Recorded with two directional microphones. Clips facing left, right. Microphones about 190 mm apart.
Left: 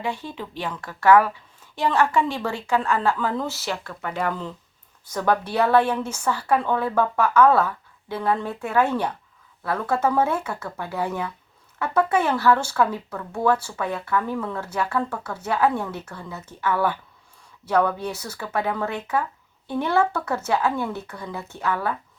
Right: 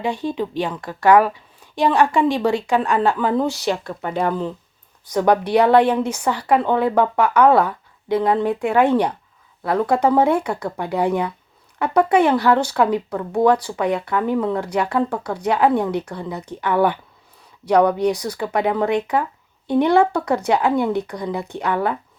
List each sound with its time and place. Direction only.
0.0 s a woman's voice: 15° right (ahead or behind)
13.1 s speech: 35° right (ahead or behind)
13.4 s a woman's voice: 15° right (ahead or behind)